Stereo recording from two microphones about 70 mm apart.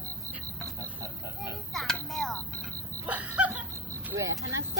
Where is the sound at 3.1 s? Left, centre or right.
Right.